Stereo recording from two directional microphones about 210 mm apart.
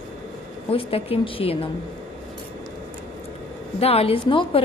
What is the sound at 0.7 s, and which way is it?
Speech, 25° left (ahead or behind).